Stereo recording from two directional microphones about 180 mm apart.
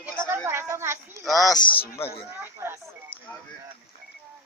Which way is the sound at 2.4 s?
15° right (ahead or behind).